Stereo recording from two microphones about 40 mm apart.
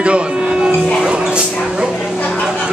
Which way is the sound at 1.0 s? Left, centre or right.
Right.